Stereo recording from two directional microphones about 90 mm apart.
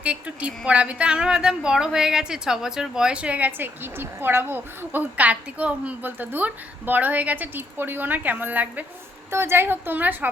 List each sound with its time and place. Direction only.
0.0 s a woman's voice: 15° right (ahead or behind)